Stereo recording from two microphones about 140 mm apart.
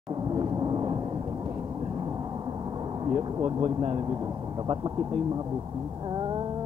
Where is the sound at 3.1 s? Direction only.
45° right (ahead or behind).